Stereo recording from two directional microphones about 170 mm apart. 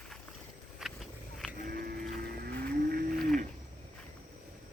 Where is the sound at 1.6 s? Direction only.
60° right (ahead or behind).